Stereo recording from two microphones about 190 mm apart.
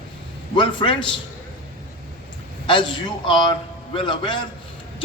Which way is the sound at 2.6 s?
25° left (ahead or behind).